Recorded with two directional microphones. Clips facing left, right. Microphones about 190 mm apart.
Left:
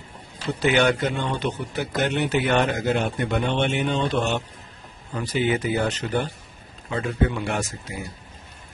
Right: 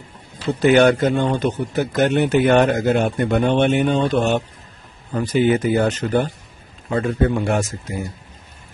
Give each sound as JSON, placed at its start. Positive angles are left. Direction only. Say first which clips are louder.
{"t": 0.6, "sound": "a man's voice", "louder": "right 7 dB", "side_deg": -45}